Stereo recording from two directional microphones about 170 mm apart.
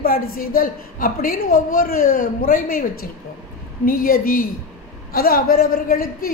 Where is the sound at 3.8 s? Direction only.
55° left (ahead or behind).